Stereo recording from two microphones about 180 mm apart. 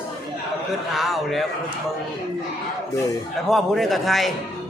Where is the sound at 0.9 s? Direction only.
Centre (ahead or behind).